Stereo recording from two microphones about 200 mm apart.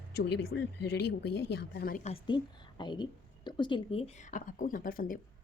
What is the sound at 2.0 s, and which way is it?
A woman's voice, 25° left (ahead or behind).